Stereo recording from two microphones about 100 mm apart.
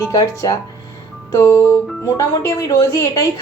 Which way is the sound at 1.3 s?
30° left (ahead or behind).